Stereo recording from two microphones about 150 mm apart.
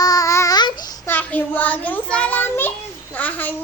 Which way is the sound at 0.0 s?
25° left (ahead or behind).